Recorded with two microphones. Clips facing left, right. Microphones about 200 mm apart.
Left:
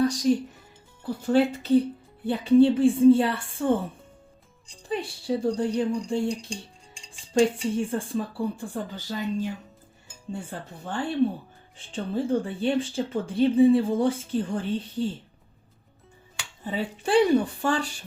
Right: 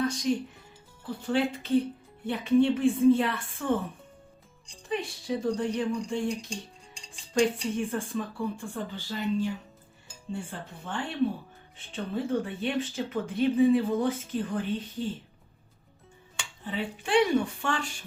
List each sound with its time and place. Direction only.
0.0 s speech: 35° left (ahead or behind)
4.9 s speech: 30° left (ahead or behind)
7.8 s speech: 30° left (ahead or behind)
10.3 s speech: 40° left (ahead or behind)
16.6 s speech: 40° left (ahead or behind)